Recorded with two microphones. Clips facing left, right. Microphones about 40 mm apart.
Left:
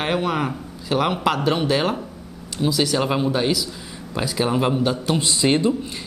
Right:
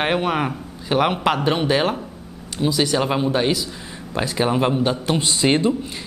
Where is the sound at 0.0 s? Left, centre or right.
Centre.